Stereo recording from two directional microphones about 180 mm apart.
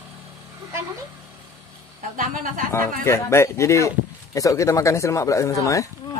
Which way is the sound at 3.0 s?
15° left (ahead or behind).